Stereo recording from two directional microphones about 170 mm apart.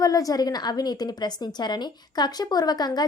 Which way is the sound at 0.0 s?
20° left (ahead or behind).